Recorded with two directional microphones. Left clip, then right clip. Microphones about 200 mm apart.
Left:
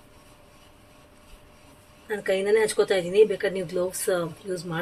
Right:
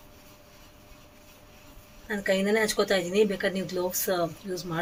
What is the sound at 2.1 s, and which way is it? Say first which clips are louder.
Speech: left 3 dB; 5° left (ahead or behind).